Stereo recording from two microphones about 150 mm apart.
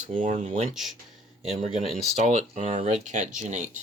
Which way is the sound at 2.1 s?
50° right (ahead or behind).